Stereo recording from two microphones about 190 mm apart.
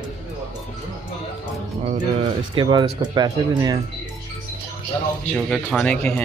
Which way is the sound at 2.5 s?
25° right (ahead or behind).